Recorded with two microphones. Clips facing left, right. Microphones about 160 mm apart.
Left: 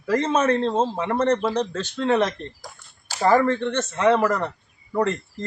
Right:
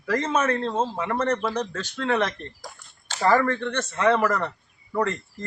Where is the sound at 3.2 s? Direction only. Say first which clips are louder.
Left 3 dB; 20° left (ahead or behind).